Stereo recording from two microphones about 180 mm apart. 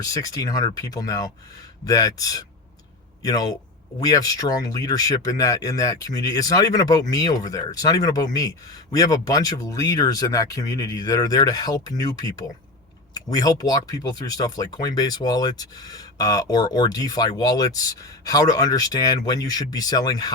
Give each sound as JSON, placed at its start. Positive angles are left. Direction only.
{"t": 0.0, "sound": "speech", "side_deg": 20}